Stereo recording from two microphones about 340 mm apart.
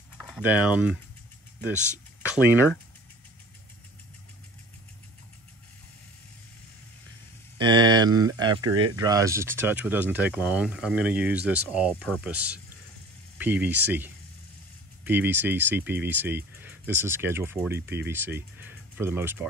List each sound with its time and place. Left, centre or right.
0.3 s speech: centre
1.6 s speech: centre
7.5 s speech: centre